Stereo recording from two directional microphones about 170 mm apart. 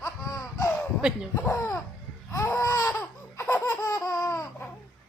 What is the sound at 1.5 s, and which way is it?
Laughter, 15° left (ahead or behind).